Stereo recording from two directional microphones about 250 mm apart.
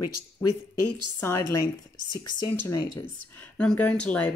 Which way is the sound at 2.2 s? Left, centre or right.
Left.